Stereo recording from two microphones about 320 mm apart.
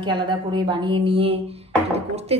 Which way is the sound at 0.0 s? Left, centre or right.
Centre.